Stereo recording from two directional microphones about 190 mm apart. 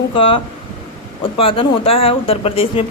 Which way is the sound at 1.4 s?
30° left (ahead or behind).